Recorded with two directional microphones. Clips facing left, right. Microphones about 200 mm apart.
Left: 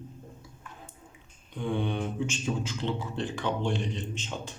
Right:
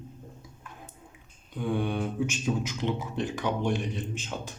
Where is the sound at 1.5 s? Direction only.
10° right (ahead or behind).